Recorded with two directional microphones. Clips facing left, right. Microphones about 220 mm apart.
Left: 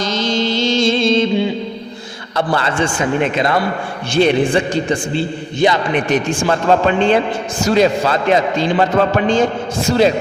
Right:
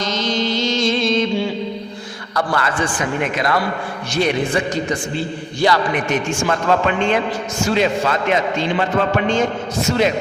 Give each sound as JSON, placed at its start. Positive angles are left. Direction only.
{"t": 0.0, "sound": "mantra", "side_deg": 30}
{"t": 2.3, "sound": "a man's voice", "side_deg": 25}
{"t": 6.1, "sound": "a man's voice", "side_deg": 35}